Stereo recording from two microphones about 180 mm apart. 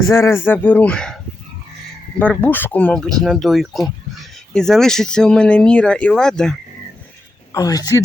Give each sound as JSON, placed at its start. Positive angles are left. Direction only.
{"t": 0.1, "sound": "a man's voice", "side_deg": 15}
{"t": 7.5, "sound": "speech", "side_deg": 20}